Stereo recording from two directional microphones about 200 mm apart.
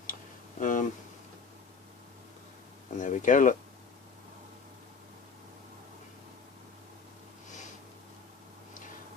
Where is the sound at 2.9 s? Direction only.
40° left (ahead or behind).